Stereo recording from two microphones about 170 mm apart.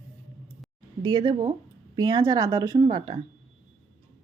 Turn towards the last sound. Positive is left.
turn(degrees=-30)  # may be behind; listen again after turning